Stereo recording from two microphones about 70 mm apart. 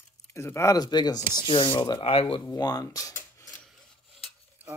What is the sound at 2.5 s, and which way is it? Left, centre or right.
Speech, left.